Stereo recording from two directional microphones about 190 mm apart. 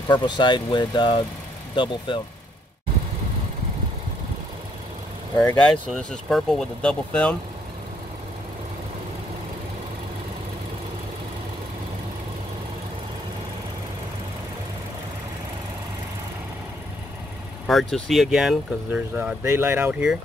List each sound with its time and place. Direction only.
0.1 s speech: 25° left (ahead or behind)
5.4 s speech: 10° left (ahead or behind)
17.6 s speech: centre (ahead or behind)